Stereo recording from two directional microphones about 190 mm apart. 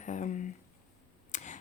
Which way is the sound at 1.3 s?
40° left (ahead or behind).